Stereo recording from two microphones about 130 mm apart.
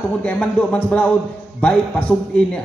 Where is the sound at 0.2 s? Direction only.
10° left (ahead or behind).